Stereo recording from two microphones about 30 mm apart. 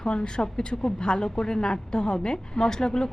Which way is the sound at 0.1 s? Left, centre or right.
Left.